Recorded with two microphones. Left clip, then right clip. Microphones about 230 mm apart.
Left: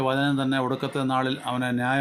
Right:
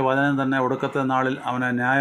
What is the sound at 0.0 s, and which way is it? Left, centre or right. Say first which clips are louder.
Speech: right 3 dB; left.